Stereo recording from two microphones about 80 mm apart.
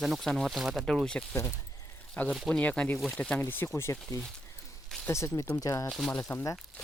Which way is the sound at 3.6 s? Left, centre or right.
Left.